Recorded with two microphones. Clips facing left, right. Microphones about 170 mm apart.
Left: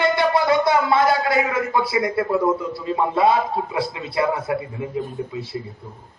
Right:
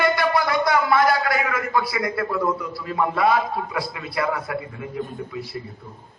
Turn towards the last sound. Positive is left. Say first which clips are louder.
# left 3 dB
turn(degrees=25)  # may be behind; listen again after turning